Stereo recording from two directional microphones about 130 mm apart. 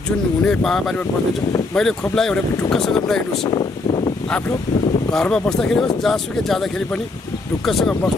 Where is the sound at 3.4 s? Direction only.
35° left (ahead or behind).